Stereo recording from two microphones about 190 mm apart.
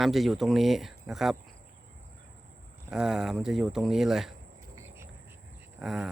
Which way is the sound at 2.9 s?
5° right (ahead or behind).